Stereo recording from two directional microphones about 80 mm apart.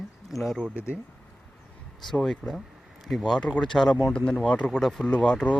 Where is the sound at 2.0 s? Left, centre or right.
Centre.